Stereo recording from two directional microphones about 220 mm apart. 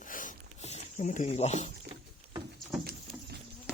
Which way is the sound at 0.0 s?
35° left (ahead or behind).